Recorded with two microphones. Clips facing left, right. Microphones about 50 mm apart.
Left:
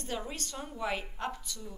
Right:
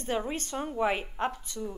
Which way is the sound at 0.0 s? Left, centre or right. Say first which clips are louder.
Right 7 dB; right.